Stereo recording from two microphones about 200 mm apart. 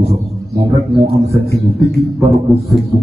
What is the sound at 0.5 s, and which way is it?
Speech, 15° right (ahead or behind).